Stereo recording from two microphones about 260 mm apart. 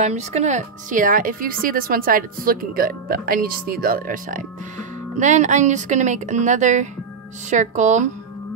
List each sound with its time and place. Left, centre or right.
0.0 s a woman's voice: right